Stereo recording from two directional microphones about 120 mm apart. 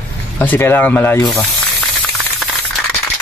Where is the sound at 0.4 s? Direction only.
15° left (ahead or behind).